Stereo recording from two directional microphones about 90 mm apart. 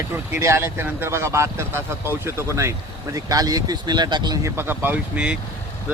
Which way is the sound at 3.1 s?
40° right (ahead or behind).